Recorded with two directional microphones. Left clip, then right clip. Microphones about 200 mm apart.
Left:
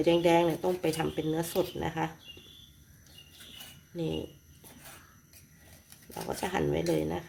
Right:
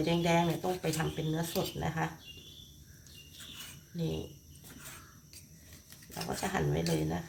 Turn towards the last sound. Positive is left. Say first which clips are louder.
# left 4 dB
turn(degrees=50)  # may be behind; listen again after turning